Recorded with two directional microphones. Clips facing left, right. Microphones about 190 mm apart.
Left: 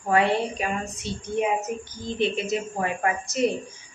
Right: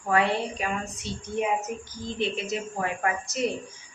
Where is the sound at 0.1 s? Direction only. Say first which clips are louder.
Left 3 dB; centre (ahead or behind).